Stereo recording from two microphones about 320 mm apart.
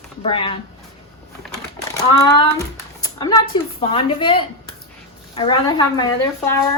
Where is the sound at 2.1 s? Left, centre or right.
Centre.